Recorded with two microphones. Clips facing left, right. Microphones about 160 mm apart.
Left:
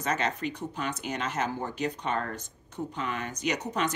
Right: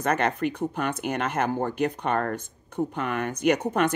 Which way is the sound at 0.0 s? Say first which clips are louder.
Right 5 dB; 55° right (ahead or behind).